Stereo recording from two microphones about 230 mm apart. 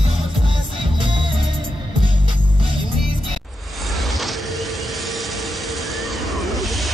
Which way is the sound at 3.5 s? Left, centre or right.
Centre.